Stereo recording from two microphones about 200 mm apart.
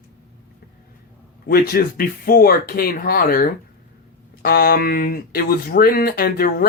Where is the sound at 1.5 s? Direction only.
50° left (ahead or behind).